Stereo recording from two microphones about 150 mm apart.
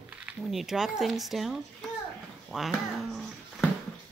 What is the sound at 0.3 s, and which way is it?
Speech, centre (ahead or behind).